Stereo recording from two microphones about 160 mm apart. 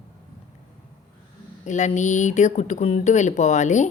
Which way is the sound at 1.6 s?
50° left (ahead or behind).